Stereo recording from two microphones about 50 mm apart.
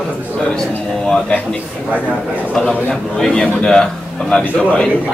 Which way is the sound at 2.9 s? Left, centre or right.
Centre.